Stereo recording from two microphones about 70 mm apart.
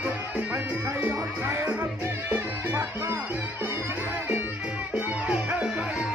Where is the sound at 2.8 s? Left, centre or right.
Right.